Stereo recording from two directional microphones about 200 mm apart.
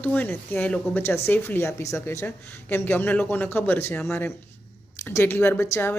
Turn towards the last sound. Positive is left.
turn(degrees=10)  # may be behind; listen again after turning